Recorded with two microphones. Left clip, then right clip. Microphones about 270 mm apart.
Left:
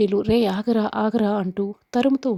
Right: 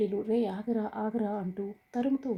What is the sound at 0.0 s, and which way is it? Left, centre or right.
Speech, left.